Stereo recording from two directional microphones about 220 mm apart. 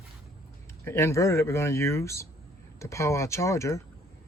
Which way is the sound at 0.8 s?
10° left (ahead or behind).